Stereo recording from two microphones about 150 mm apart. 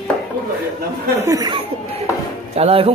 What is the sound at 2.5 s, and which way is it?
Speech, 40° right (ahead or behind).